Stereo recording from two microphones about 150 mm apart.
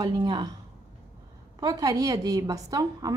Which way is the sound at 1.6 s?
25° right (ahead or behind).